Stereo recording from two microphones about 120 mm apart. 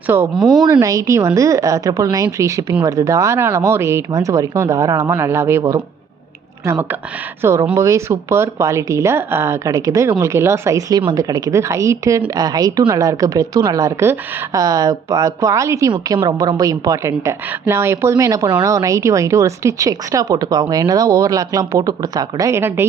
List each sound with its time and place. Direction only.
0.3 s speech: centre (ahead or behind)
0.7 s speech: 30° right (ahead or behind)
7.4 s a woman's voice: 25° right (ahead or behind)
15.9 s speech: 35° right (ahead or behind); by 22.9 s 20° right (ahead or behind)